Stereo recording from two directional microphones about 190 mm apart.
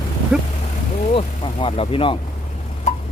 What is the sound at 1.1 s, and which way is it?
Speech, 30° left (ahead or behind).